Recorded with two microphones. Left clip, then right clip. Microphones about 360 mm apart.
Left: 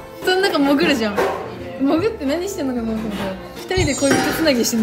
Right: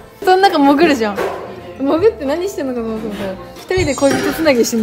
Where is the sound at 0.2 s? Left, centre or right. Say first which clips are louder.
Right 7 dB; centre.